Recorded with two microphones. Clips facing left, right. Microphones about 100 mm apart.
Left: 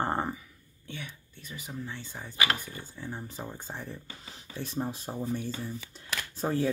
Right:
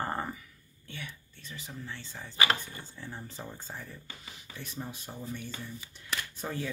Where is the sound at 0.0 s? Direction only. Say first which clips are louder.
Left 4 dB; 25° left (ahead or behind).